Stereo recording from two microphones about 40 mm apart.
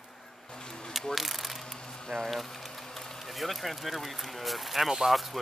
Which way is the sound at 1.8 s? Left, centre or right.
Centre.